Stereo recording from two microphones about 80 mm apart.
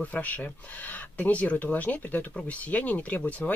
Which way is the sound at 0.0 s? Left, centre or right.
Left.